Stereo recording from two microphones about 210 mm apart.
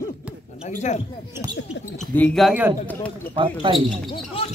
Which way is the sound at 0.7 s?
35° left (ahead or behind).